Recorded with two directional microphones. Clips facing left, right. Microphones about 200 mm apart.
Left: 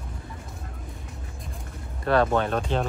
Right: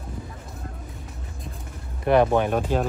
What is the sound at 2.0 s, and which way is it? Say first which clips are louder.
Speech: right 3 dB; 15° right (ahead or behind).